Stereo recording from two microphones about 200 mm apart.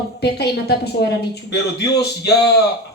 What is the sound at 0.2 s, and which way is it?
Speech, 55° left (ahead or behind).